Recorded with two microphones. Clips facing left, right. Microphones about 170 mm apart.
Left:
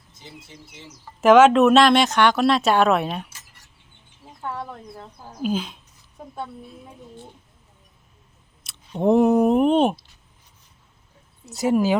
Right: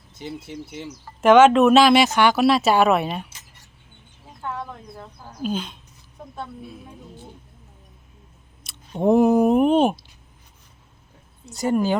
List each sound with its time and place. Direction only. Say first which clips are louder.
0.1 s a sound: right 12 dB; 70° right (ahead or behind)
0.4 s speech: right 11 dB; 70° right (ahead or behind)
1.2 s speech: even; centre (ahead or behind)
4.4 s a woman's voice: even; 10° left (ahead or behind)
8.6 s speech: even; centre (ahead or behind)
11.4 s speech: left 1 dB; centre (ahead or behind)